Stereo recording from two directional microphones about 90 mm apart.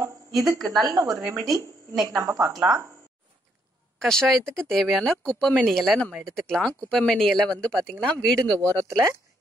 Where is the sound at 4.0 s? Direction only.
5° left (ahead or behind).